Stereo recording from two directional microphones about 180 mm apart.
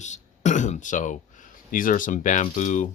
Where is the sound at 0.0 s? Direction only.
40° left (ahead or behind).